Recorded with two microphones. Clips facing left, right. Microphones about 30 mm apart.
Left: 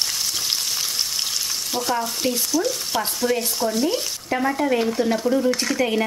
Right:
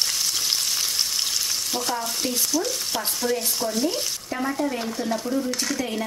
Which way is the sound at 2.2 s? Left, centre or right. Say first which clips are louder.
Left 3 dB; centre.